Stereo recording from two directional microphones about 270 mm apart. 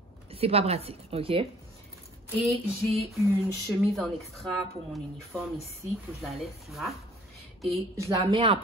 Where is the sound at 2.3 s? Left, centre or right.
Centre.